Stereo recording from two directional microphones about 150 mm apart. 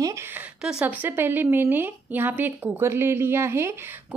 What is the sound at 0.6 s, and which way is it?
A woman's voice, 10° right (ahead or behind).